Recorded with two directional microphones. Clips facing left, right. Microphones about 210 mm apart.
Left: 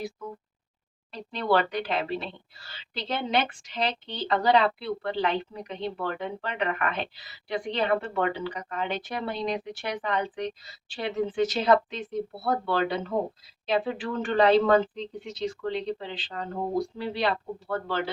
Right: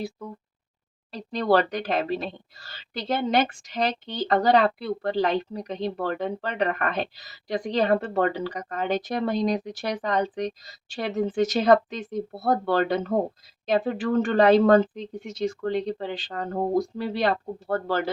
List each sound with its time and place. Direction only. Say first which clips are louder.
1.1 s speech: right 3 dB; 40° right (ahead or behind)